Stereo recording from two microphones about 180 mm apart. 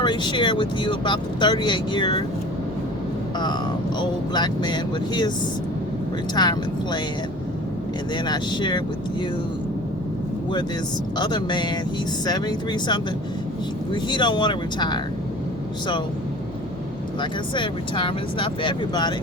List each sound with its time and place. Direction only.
0.0 s speech: 25° left (ahead or behind)
3.3 s speech: 25° left (ahead or behind)
6.3 s speech: 25° left (ahead or behind)
8.1 s speech: 25° left (ahead or behind)
11.2 s speech: 25° left (ahead or behind)
17.2 s speech: 25° left (ahead or behind)